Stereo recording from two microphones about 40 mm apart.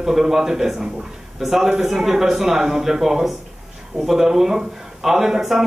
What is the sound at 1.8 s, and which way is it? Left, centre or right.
Speech, centre.